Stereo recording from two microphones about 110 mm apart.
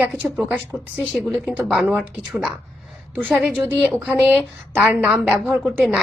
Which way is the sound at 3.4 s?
15° right (ahead or behind).